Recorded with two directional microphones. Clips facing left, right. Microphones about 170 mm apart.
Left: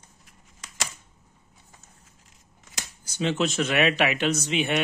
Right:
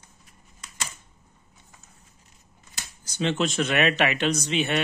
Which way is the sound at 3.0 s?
5° left (ahead or behind).